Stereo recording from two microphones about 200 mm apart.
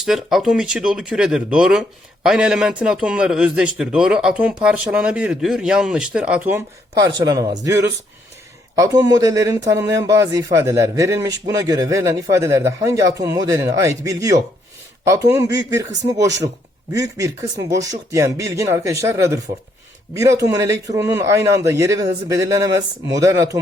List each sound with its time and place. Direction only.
0.0 s a man's voice: centre (ahead or behind)
7.0 s speech: 20° right (ahead or behind)
16.9 s speech: 15° right (ahead or behind)